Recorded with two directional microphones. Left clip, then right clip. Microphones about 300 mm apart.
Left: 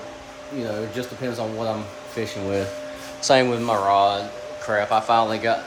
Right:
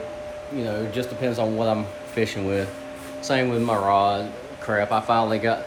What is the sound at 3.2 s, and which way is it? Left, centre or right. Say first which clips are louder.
Speech: left 6 dB; centre.